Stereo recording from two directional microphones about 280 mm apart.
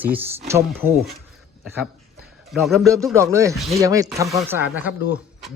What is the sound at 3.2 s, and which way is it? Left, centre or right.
Speech, centre.